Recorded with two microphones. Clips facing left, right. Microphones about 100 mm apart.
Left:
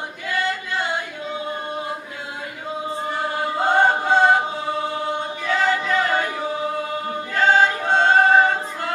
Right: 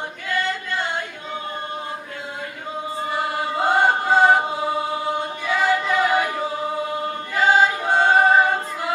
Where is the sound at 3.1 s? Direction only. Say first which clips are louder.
Right 1 dB; 5° right (ahead or behind).